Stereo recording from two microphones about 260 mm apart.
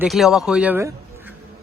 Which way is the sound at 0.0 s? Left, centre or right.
Centre.